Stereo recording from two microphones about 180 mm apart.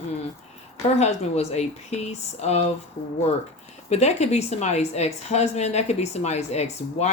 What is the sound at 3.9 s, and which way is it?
Speech, 40° left (ahead or behind).